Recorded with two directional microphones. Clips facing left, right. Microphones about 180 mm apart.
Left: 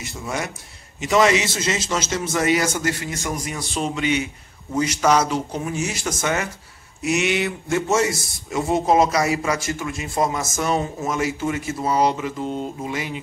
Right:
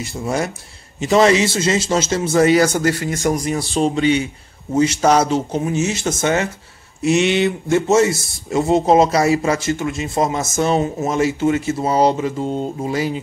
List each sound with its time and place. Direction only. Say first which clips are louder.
0.0 s a man's voice: right 6 dB; 35° right (ahead or behind)